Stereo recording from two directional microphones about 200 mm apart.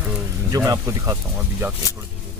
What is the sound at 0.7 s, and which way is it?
Speech, 15° right (ahead or behind).